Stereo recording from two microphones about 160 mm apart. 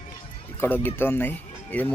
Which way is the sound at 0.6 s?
15° left (ahead or behind).